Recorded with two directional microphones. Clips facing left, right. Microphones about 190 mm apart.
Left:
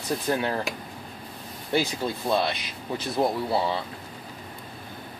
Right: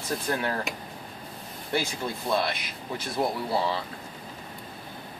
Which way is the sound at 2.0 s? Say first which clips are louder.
Left 3 dB; 30° left (ahead or behind).